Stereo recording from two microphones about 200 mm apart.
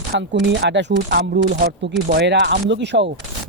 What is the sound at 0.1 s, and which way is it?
Speech, 55° right (ahead or behind).